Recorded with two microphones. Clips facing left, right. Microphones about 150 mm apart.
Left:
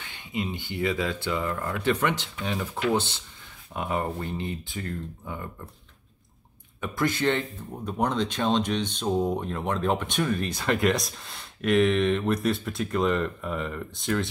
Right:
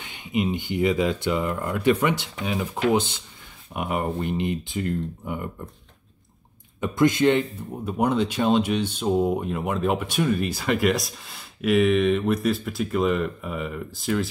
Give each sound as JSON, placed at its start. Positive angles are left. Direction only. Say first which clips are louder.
{"t": 0.0, "sound": "speech", "louder": "right 6 dB", "side_deg": -15}
{"t": 6.8, "sound": "speech", "louder": "right 7 dB", "side_deg": -20}